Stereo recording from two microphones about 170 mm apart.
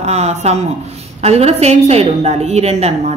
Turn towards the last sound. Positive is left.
turn(degrees=-40)  # may be behind; listen again after turning